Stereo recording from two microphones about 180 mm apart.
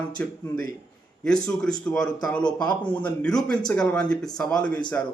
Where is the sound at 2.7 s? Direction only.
25° left (ahead or behind).